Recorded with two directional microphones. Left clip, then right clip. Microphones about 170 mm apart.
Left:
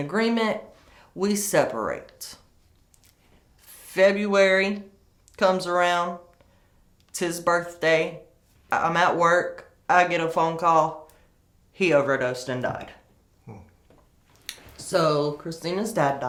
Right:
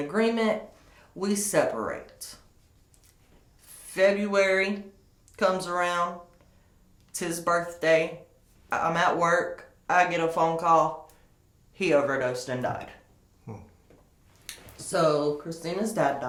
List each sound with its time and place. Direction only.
0.1 s speech: 30° left (ahead or behind)
3.6 s speech: 30° left (ahead or behind)
7.1 s speech: 30° left (ahead or behind)
13.5 s speech: 10° right (ahead or behind)
14.4 s speech: 40° left (ahead or behind)